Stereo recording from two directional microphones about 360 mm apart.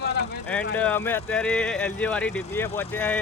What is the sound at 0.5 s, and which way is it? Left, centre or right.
Speech, centre.